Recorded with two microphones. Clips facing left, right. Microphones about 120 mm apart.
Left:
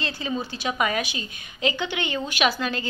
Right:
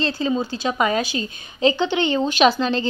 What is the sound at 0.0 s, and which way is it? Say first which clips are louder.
A woman's voice: right 7 dB; 30° right (ahead or behind).